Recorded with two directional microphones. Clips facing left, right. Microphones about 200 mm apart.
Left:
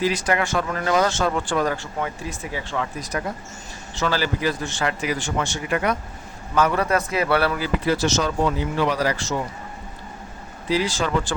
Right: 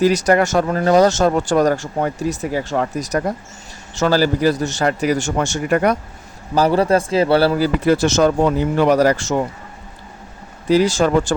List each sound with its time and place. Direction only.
0.0 s speech: 40° right (ahead or behind)
6.5 s speech: 30° right (ahead or behind)
7.9 s speech: 50° right (ahead or behind)
10.7 s speech: 45° right (ahead or behind)